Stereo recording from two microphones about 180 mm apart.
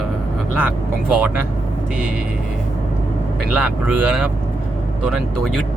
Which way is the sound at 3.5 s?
5° right (ahead or behind).